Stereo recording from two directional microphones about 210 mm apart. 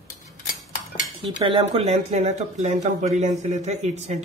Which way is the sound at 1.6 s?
30° right (ahead or behind).